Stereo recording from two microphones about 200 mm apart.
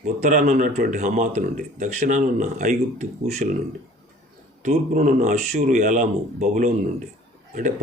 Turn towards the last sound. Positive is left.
turn(degrees=-40)  # may be behind; listen again after turning